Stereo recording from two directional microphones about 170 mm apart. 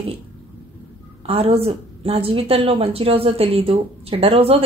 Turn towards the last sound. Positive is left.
turn(degrees=-35)  # may be behind; listen again after turning